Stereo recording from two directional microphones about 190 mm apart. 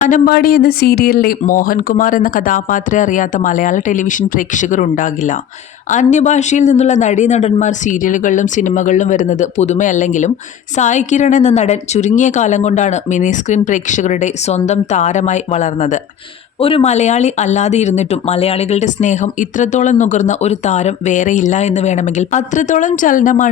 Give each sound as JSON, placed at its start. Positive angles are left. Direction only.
{"t": 0.1, "sound": "speech", "side_deg": 50}
{"t": 16.6, "sound": "speech", "side_deg": 30}